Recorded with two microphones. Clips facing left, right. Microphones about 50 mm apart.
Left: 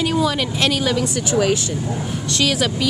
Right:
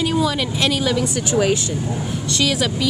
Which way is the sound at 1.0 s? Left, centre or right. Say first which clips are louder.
Even; centre.